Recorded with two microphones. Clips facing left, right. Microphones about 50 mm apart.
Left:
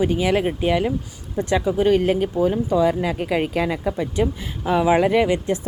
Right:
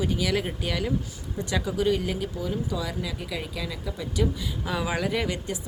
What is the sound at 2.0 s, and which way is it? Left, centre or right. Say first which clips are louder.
Speech: left 11 dB; left.